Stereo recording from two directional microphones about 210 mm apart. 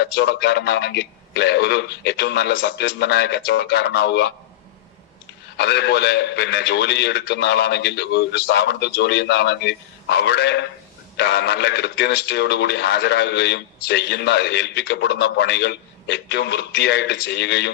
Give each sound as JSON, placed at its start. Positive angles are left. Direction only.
{"t": 0.0, "sound": "a man's voice", "side_deg": 50}
{"t": 5.5, "sound": "a man's voice", "side_deg": 50}